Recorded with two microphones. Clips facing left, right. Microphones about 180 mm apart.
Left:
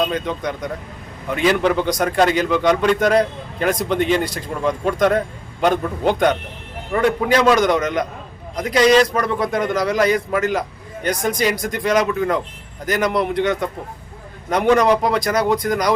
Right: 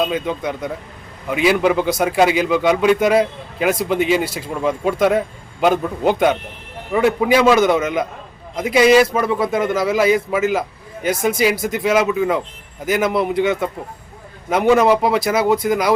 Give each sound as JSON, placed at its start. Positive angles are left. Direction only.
{"t": 0.0, "sound": "a man's voice", "side_deg": -5}